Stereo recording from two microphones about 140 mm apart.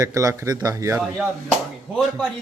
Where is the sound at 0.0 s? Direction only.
25° right (ahead or behind).